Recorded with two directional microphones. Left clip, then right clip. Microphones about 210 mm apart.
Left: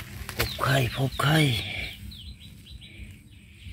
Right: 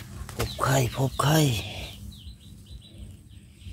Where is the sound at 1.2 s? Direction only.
10° right (ahead or behind).